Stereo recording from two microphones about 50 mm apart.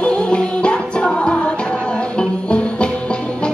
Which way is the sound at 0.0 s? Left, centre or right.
Left.